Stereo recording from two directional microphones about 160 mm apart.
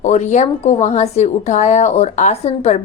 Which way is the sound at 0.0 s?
50° left (ahead or behind).